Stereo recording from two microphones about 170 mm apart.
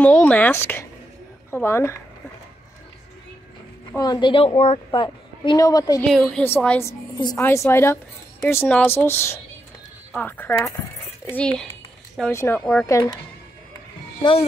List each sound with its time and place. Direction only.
0.0 s a woman's voice: 10° left (ahead or behind)
3.9 s a woman's voice: 25° left (ahead or behind)
6.0 s a woman's voice: centre (ahead or behind)
12.8 s a woman's voice: 20° left (ahead or behind)